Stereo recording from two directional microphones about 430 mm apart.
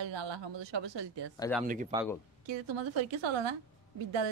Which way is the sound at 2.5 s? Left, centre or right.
Right.